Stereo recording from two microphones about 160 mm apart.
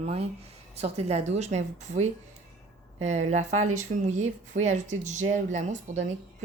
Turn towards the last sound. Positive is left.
turn(degrees=-45)  # may be behind; listen again after turning